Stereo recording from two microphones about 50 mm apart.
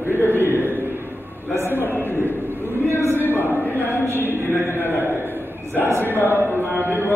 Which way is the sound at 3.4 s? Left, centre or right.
Left.